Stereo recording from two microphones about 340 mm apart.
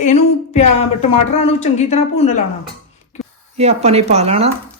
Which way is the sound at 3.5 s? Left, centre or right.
Centre.